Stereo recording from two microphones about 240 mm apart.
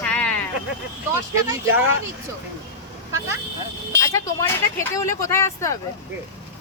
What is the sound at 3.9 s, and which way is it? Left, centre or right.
Speech, centre.